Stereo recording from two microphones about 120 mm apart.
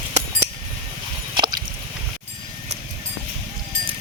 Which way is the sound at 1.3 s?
35° right (ahead or behind).